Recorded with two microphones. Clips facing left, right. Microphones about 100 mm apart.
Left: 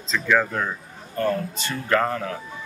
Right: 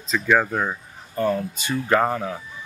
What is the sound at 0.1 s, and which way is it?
Speech, 15° right (ahead or behind).